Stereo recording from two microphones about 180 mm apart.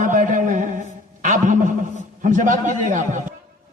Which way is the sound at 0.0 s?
45° right (ahead or behind).